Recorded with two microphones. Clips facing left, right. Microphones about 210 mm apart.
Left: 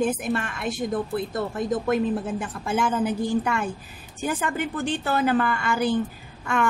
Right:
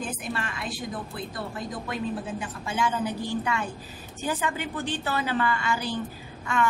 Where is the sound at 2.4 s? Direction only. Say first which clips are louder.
Left 3 dB; 50° left (ahead or behind).